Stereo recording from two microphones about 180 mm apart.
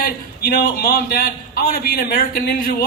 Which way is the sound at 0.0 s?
55° left (ahead or behind).